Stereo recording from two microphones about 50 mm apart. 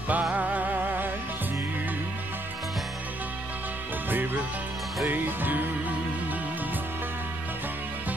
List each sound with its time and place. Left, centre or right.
0.1 s music: right
4.1 s music: right